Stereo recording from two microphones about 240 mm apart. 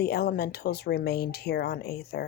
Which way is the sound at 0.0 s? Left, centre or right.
Left.